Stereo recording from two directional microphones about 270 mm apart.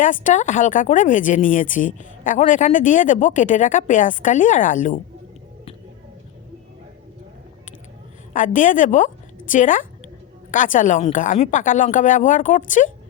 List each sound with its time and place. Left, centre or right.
0.0 s speech: left
8.3 s speech: left